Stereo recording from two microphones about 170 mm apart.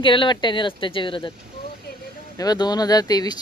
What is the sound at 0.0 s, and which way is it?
Speech, 30° left (ahead or behind).